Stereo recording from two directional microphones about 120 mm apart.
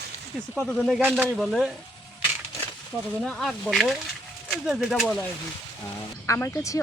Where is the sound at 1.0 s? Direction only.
15° right (ahead or behind).